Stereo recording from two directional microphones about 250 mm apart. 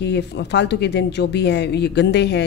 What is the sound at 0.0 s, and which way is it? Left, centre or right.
A woman's voice, left.